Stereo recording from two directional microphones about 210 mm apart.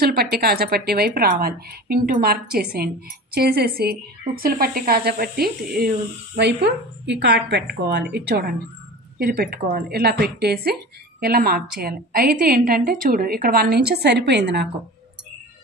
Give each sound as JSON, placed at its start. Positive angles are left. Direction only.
{"t": 0.0, "sound": "speech", "side_deg": -45}